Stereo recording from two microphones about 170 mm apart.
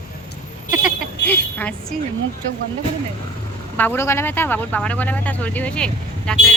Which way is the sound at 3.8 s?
10° left (ahead or behind).